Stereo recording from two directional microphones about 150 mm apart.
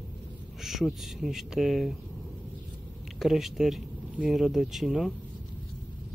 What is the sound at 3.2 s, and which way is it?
Speech, centre (ahead or behind).